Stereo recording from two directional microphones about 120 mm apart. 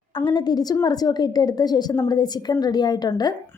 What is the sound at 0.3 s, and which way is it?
Speech, 35° left (ahead or behind).